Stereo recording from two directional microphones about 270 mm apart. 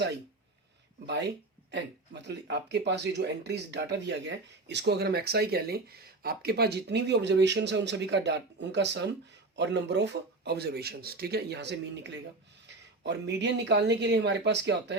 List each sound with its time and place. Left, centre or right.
1.0 s speech: right